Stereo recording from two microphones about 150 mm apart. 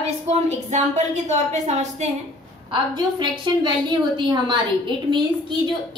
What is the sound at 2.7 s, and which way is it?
A woman's voice, 30° right (ahead or behind).